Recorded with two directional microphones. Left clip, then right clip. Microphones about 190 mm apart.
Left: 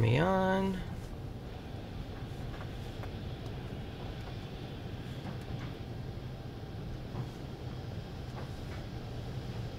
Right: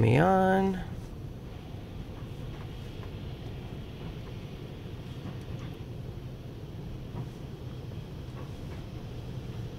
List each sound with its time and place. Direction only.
0.0 s speech: 35° right (ahead or behind)